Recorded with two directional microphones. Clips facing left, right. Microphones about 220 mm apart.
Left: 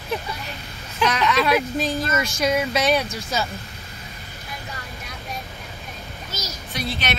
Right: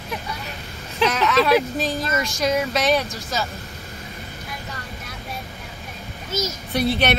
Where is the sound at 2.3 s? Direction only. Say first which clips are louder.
Even; centre (ahead or behind).